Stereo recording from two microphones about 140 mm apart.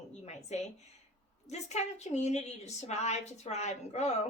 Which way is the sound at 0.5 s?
55° left (ahead or behind).